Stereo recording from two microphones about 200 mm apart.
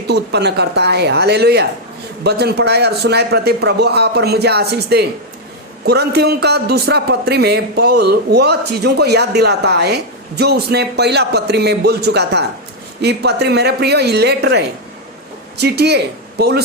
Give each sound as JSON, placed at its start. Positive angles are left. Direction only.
{"t": 0.1, "sound": "a man's voice", "side_deg": -55}